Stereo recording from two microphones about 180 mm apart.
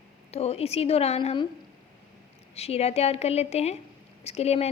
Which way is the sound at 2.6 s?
35° left (ahead or behind).